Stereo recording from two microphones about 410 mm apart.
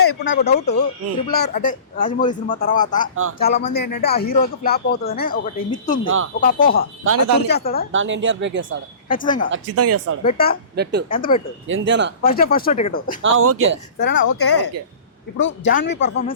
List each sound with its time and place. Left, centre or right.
0.0 s speech: left
0.3 s speech: centre
7.0 s speech: right
7.4 s speech: left
7.9 s speech: right
9.0 s speech: centre
9.5 s speech: right
10.2 s speech: left
11.7 s speech: right
12.2 s speech: left
13.2 s speech: right
14.0 s speech: left